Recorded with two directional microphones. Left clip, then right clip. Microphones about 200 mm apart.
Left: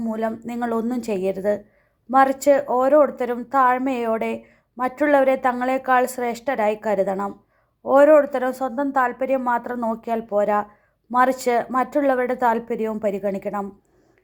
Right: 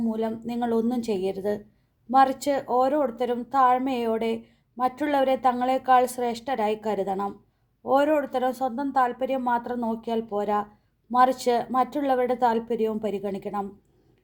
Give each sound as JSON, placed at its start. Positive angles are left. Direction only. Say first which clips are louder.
{"t": 0.0, "sound": "a woman's voice", "louder": "left 3 dB", "side_deg": 15}